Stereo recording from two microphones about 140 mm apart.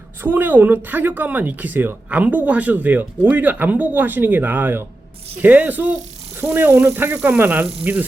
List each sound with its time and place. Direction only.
0.2 s speech: 15° right (ahead or behind)